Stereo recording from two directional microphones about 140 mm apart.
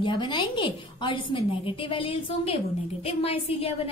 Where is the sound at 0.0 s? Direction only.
35° left (ahead or behind).